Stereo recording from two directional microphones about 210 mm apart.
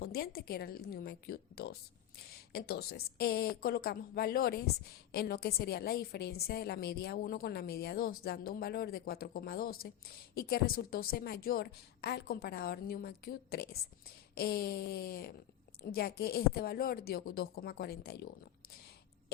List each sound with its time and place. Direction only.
0.0 s a woman's voice: 50° left (ahead or behind)